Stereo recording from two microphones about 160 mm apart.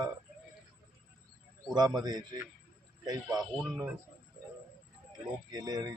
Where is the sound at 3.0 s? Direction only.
25° right (ahead or behind).